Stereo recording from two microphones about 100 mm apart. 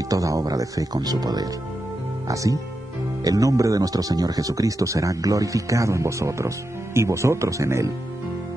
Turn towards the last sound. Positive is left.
turn(degrees=-30)  # may be behind; listen again after turning